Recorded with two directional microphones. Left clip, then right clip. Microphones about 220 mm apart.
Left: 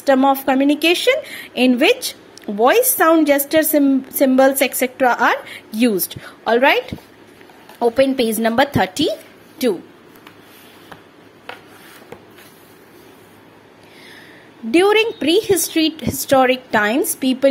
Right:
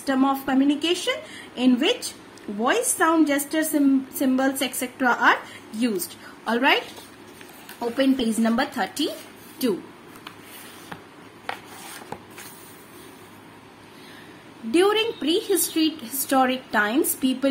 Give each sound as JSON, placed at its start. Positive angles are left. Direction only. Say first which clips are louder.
{"t": 0.0, "sound": "a woman's voice", "louder": "left 9 dB", "side_deg": 35}
{"t": 7.8, "sound": "a woman's voice", "louder": "left 8 dB", "side_deg": 40}
{"t": 14.7, "sound": "a woman's voice", "louder": "left 6 dB", "side_deg": 30}